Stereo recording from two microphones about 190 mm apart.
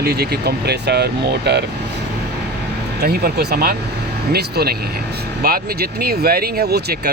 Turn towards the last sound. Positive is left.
turn(degrees=-60)  # may be behind; listen again after turning